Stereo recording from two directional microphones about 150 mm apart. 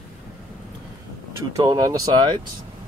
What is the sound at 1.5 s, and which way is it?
Speech, 25° right (ahead or behind).